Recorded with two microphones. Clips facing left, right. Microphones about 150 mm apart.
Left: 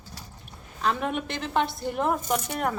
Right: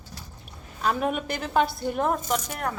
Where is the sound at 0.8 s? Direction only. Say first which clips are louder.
Right 1 dB; 5° right (ahead or behind).